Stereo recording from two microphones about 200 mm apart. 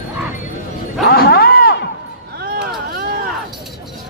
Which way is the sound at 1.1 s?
50° left (ahead or behind).